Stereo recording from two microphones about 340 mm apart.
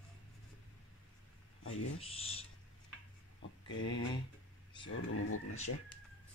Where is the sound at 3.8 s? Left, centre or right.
Left.